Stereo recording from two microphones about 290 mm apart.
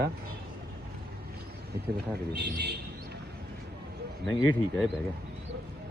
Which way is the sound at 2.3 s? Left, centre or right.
Right.